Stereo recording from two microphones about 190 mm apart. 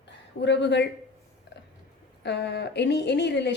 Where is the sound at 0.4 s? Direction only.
65° left (ahead or behind).